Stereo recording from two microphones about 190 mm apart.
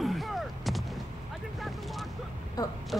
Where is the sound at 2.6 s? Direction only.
20° left (ahead or behind).